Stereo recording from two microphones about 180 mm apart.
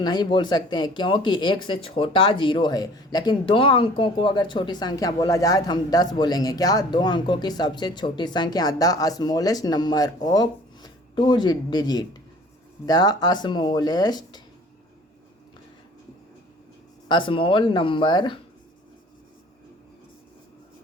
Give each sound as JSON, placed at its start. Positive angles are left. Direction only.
{"t": 0.0, "sound": "speech", "side_deg": 25}
{"t": 17.1, "sound": "speech", "side_deg": 25}